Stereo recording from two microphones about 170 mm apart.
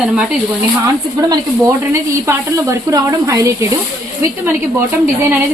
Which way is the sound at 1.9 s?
20° right (ahead or behind).